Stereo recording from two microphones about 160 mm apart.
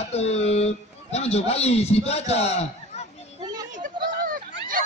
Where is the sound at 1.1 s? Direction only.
40° left (ahead or behind).